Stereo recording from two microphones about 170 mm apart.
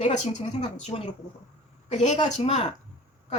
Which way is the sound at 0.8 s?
35° left (ahead or behind).